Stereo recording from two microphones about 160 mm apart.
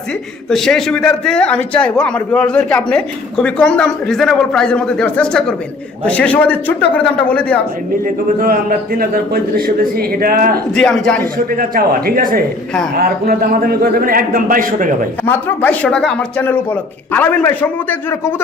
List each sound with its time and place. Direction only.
0.5 s a man's voice: 5° left (ahead or behind)
8.0 s a man's voice: 65° right (ahead or behind)
10.8 s a man's voice: 5° left (ahead or behind)
11.5 s a man's voice: 60° right (ahead or behind)
15.3 s a man's voice: 10° left (ahead or behind)